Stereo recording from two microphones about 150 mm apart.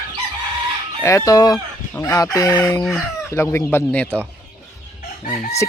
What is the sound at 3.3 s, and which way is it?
Speech, 15° left (ahead or behind).